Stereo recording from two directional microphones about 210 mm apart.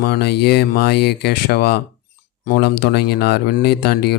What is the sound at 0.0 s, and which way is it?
Speech, 50° left (ahead or behind).